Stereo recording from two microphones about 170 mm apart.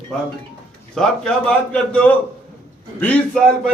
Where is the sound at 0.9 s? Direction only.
5° left (ahead or behind).